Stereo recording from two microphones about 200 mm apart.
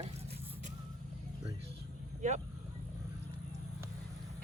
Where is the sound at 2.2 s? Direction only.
35° right (ahead or behind).